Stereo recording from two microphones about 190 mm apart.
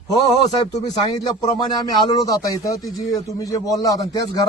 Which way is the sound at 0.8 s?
20° left (ahead or behind).